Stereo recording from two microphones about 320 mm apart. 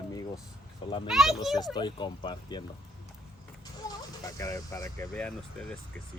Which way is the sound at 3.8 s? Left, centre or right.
Centre.